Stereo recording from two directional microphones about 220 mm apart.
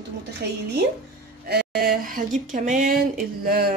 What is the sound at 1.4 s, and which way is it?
Speech, 45° right (ahead or behind).